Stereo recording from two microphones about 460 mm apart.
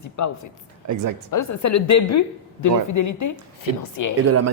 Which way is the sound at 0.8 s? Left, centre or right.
Right.